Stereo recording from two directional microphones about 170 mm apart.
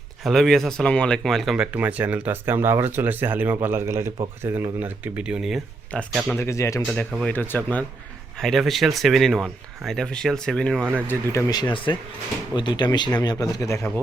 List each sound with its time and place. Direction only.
0.3 s speech: centre (ahead or behind)
6.4 s speech: 15° left (ahead or behind)
6.8 s speech: 5° left (ahead or behind)